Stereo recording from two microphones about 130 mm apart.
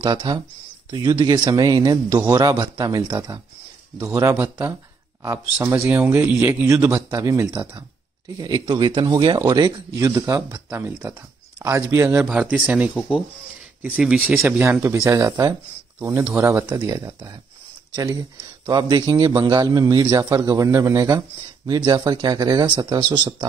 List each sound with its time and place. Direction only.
0.0 s a man's voice: 35° right (ahead or behind); by 12.3 s 20° right (ahead or behind)
12.3 s a man's voice: 10° right (ahead or behind); by 23.3 s 35° right (ahead or behind)